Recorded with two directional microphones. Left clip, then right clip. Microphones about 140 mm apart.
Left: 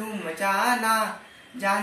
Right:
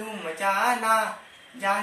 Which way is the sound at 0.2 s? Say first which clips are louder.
Even; 10° right (ahead or behind).